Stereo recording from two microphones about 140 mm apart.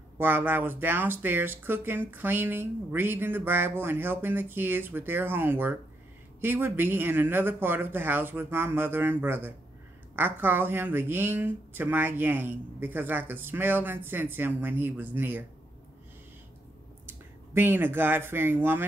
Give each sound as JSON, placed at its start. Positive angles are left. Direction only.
{"t": 0.2, "sound": "speech", "side_deg": -15}
{"t": 17.0, "sound": "speech", "side_deg": -15}